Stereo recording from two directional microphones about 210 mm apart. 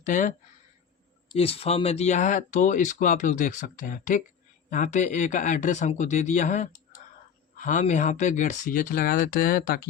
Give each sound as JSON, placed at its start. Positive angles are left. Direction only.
{"t": 0.0, "sound": "speech", "side_deg": 35}
{"t": 1.4, "sound": "speech", "side_deg": 30}